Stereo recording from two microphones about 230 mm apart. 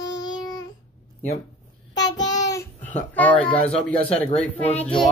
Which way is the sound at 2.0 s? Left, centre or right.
Centre.